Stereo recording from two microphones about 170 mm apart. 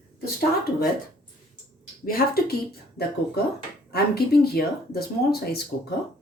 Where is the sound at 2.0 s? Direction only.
60° left (ahead or behind).